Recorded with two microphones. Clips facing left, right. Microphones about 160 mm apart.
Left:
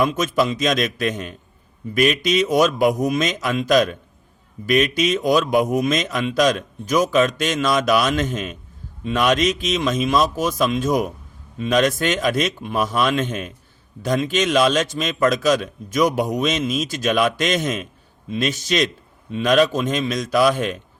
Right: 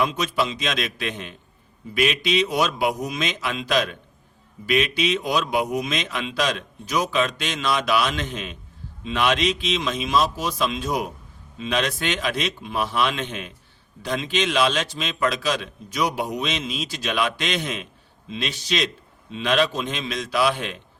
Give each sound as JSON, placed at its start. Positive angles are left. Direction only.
{"t": 0.0, "sound": "a man's voice", "side_deg": 45}